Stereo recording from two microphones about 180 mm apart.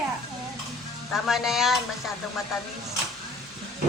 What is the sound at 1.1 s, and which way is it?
Speech, centre (ahead or behind).